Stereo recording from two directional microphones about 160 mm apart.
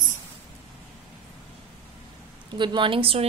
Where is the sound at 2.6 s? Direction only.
30° right (ahead or behind).